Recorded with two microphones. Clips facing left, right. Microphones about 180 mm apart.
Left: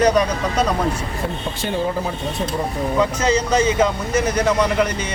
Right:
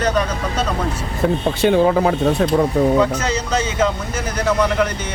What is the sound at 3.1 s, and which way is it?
Speech, 10° left (ahead or behind).